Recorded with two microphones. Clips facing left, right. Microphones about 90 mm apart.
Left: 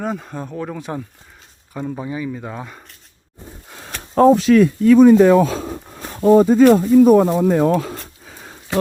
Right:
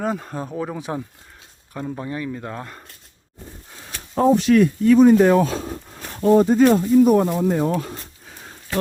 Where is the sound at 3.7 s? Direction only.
85° left.